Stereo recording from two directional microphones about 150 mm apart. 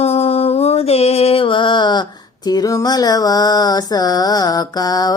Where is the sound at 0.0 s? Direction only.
45° left (ahead or behind).